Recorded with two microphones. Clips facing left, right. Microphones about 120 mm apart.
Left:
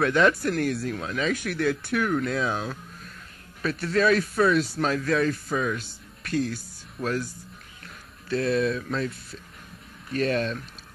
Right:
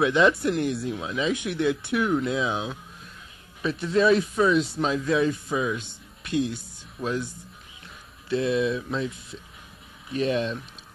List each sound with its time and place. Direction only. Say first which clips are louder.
0.3 s speech: right 1 dB; 25° right (ahead or behind)
0.7 s speech: even; 10° right (ahead or behind)
1.3 s speech: right 2 dB; 20° right (ahead or behind)
2.0 s speech: right 1 dB; 10° right (ahead or behind)
3.6 s speech: right 2 dB; 20° right (ahead or behind)
7.0 s speech: even; centre (ahead or behind)
8.3 s speech: even; 15° right (ahead or behind)